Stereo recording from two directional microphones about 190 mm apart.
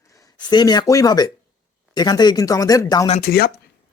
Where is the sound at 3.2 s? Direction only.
55° left (ahead or behind).